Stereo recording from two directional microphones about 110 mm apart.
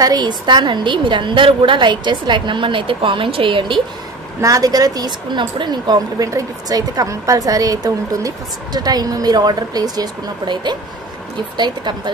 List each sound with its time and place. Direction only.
0.0 s a woman's voice: 40° right (ahead or behind)
4.4 s a woman's voice: 30° right (ahead or behind)